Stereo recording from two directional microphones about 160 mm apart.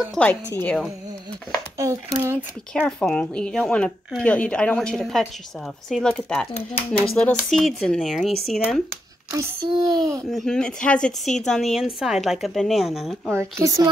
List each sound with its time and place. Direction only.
0.0 s speech: centre (ahead or behind)
1.8 s speech: 20° right (ahead or behind)
2.7 s speech: 5° left (ahead or behind)
9.3 s a child's voice: 15° right (ahead or behind)
10.3 s speech: 5° left (ahead or behind)
13.3 s speech: 15° right (ahead or behind)